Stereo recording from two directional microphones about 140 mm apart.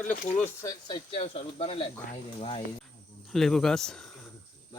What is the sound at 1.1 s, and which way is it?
Speech, 45° left (ahead or behind).